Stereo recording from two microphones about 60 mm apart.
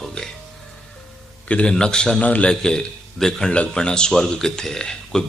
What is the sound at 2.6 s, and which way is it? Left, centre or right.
Speech, centre.